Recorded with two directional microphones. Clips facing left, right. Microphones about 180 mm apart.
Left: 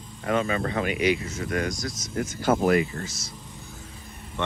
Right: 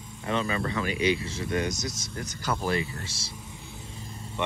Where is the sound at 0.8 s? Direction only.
30° right (ahead or behind).